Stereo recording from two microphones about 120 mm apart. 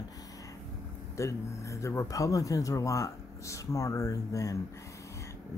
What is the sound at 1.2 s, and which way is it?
Speech, 25° left (ahead or behind).